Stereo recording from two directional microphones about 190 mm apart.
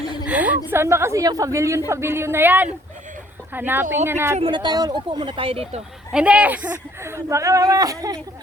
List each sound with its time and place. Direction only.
0.0 s a sound: 20° left (ahead or behind)
0.3 s speech: 10° right (ahead or behind)
4.4 s speech: 25° right (ahead or behind)
6.1 s speech: 5° right (ahead or behind)